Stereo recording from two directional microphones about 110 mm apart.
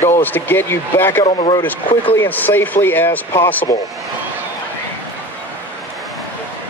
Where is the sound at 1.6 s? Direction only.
15° left (ahead or behind).